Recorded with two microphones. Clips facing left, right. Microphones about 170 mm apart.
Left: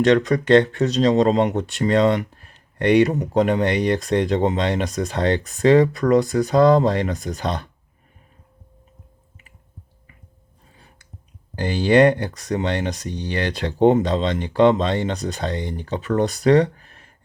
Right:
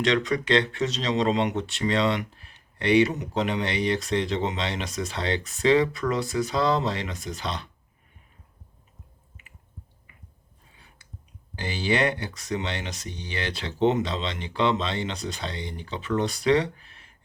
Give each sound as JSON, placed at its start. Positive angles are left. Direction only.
{"t": 0.0, "sound": "speech", "side_deg": 45}
{"t": 11.5, "sound": "speech", "side_deg": 50}